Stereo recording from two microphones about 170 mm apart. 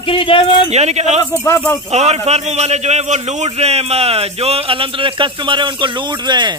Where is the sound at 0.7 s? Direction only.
40° right (ahead or behind).